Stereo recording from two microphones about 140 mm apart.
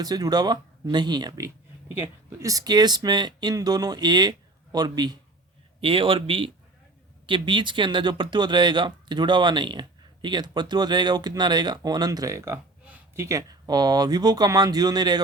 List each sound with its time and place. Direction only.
0.0 s speech: 30° right (ahead or behind)
12.8 s a sound: 10° right (ahead or behind)
13.2 s speech: 25° right (ahead or behind)